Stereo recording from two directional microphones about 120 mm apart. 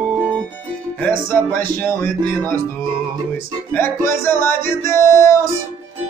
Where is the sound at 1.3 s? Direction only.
20° left (ahead or behind).